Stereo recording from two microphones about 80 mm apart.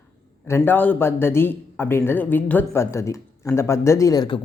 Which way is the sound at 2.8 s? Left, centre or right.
Left.